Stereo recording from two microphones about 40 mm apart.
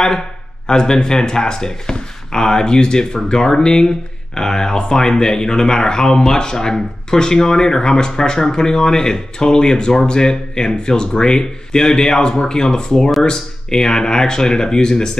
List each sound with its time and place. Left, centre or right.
0.7 s speech: centre